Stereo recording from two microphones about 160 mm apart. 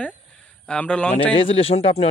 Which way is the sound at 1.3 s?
35° left (ahead or behind).